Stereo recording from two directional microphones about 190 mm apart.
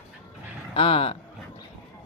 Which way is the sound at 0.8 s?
30° left (ahead or behind).